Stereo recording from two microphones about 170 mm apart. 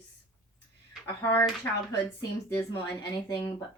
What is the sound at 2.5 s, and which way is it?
Speech, 10° left (ahead or behind).